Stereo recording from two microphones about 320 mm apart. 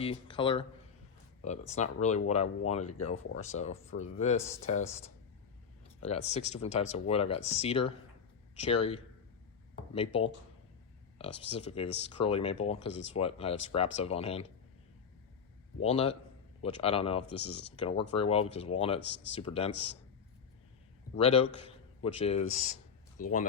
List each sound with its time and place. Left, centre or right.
0.0 s speech: centre
6.0 s speech: centre
15.8 s speech: centre
21.2 s a man's voice: centre